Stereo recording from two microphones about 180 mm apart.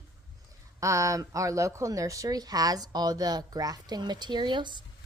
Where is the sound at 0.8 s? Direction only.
15° right (ahead or behind).